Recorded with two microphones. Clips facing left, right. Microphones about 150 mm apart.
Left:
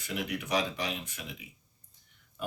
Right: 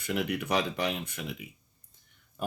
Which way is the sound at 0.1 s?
60° right (ahead or behind).